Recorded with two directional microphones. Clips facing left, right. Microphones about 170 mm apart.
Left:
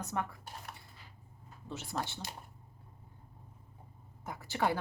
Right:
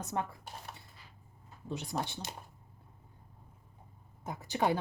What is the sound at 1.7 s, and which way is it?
Speech, 15° right (ahead or behind).